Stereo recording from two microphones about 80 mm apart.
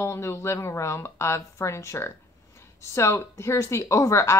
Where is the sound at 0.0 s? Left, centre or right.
Left.